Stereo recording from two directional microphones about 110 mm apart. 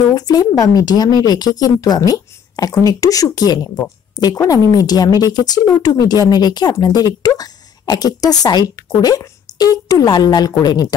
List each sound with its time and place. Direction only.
0.1 s speech: 35° left (ahead or behind)